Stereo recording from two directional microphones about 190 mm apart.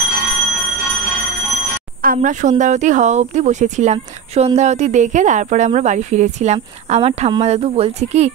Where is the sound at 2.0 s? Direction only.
45° right (ahead or behind).